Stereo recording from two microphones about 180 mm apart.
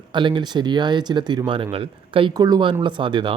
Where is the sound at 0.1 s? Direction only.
25° right (ahead or behind).